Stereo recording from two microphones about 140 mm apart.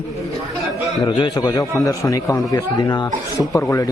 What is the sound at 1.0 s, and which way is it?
A man's voice, 30° left (ahead or behind).